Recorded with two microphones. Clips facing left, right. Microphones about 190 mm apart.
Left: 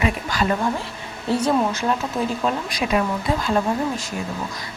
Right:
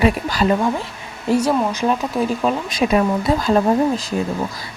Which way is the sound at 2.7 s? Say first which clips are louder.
Right 5 dB; 35° right (ahead or behind).